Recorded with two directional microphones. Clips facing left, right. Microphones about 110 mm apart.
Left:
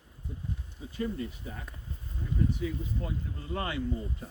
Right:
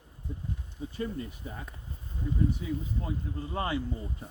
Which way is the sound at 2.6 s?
25° right (ahead or behind).